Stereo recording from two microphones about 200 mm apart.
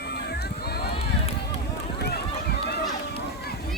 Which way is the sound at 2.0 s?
55° left (ahead or behind).